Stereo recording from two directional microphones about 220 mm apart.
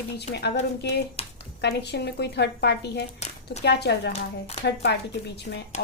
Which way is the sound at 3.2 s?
30° left (ahead or behind).